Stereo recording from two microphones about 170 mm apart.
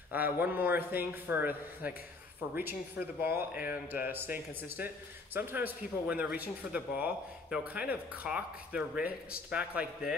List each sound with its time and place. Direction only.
0.1 s a man's voice: 10° right (ahead or behind)